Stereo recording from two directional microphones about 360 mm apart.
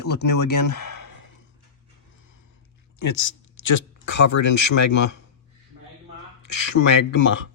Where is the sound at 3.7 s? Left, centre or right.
Left.